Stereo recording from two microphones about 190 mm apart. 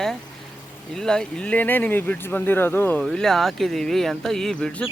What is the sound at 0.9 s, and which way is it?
Speech, 5° left (ahead or behind).